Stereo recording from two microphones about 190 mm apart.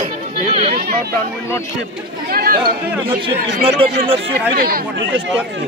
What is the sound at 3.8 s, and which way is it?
Speech, 30° right (ahead or behind).